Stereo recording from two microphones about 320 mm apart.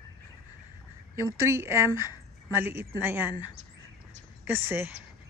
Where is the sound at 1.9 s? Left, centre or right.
Centre.